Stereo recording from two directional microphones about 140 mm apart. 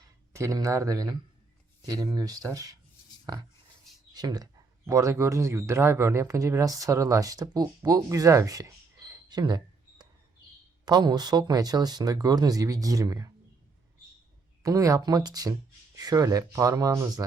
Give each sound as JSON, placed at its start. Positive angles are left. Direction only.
{"t": 0.3, "sound": "speech", "side_deg": -25}
{"t": 4.1, "sound": "speech", "side_deg": -30}
{"t": 10.8, "sound": "speech", "side_deg": -30}
{"t": 14.6, "sound": "speech", "side_deg": -25}